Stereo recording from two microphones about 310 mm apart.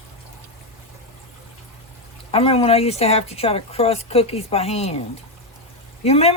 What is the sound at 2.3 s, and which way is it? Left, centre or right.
Speech, centre.